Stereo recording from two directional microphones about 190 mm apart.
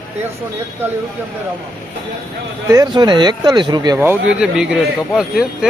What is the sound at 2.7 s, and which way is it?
Speech, 20° right (ahead or behind).